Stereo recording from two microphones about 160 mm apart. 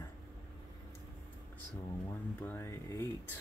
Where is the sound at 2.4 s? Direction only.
15° left (ahead or behind).